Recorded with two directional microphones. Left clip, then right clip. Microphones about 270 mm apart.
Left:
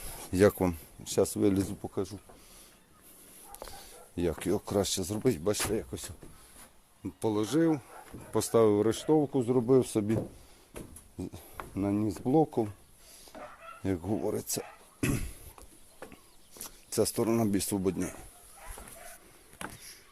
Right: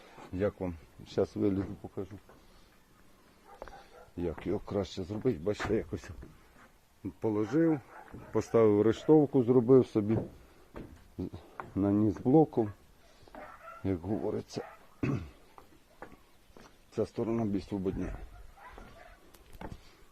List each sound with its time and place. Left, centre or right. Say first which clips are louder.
0.3 s speech: left 9 dB; left
1.0 s speech: left 3 dB; centre
4.2 s speech: left 4 dB; left
5.5 s speech: even; centre
11.2 s speech: even; centre
13.8 s speech: left 2 dB; centre
16.6 s speech: left 5 dB; left